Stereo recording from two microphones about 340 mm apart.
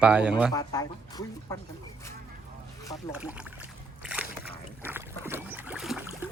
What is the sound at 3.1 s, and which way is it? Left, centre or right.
Splash, centre.